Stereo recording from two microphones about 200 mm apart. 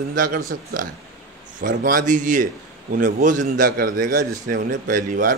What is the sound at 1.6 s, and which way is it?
A man's voice, 45° right (ahead or behind).